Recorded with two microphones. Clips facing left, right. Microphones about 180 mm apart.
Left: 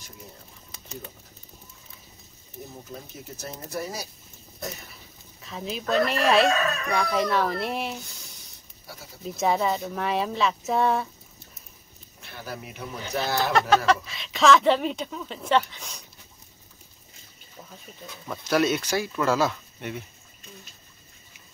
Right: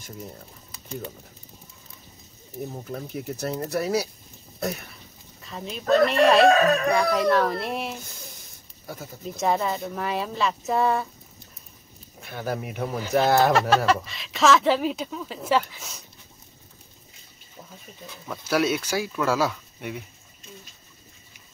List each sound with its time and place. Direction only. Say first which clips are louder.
2.9 s speech: right 8 dB; 65° right (ahead or behind)
4.6 s a sound: right 7 dB; 65° right (ahead or behind)
4.9 s speech: right 1 dB; centre (ahead or behind)
8.0 s a sound: right 3 dB; 45° right (ahead or behind)
9.2 s speech: left 1 dB; centre (ahead or behind)
12.3 s speech: right 8 dB; 55° right (ahead or behind)
13.5 s speech: right 1 dB; centre (ahead or behind)
18.0 s speech: even; centre (ahead or behind)